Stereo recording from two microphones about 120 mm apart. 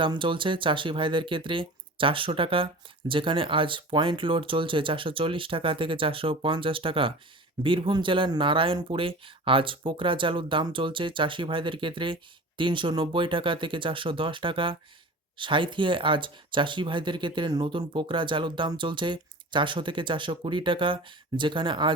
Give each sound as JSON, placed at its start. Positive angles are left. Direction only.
{"t": 0.0, "sound": "speech", "side_deg": -45}